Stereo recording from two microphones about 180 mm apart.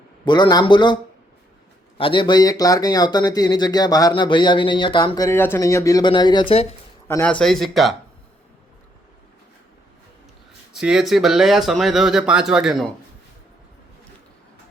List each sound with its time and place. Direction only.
0.3 s speech: 25° left (ahead or behind)
2.0 s speech: 30° left (ahead or behind)
7.1 s speech: 10° left (ahead or behind)
10.7 s speech: 5° right (ahead or behind)